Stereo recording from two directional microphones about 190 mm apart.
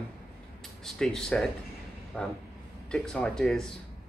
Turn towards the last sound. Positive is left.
turn(degrees=0)  # may be behind; listen again after turning